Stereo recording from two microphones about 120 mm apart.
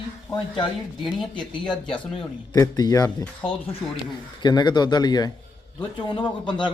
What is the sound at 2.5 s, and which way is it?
Speech, 30° left (ahead or behind).